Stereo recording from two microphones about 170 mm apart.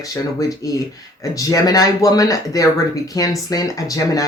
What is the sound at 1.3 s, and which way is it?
Speech, 20° left (ahead or behind).